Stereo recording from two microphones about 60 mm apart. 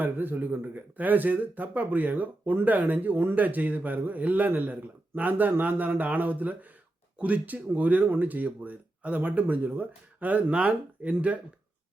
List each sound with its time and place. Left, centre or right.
0.0 s speech: right